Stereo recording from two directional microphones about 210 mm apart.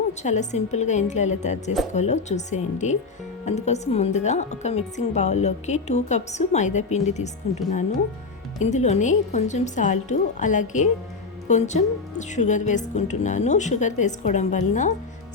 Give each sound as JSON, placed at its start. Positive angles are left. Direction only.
{"t": 0.1, "sound": "a woman's voice", "side_deg": 35}